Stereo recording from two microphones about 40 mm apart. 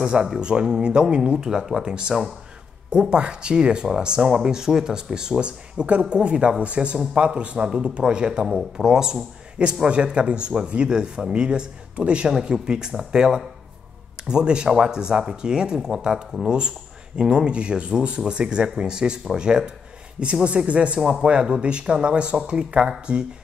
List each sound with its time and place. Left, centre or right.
0.0 s speech: right
1.4 s speech: centre
2.9 s speech: right
5.4 s speech: right
20.4 s speech: right